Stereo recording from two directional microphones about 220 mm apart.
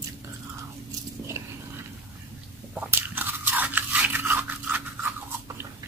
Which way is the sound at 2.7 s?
10° right (ahead or behind).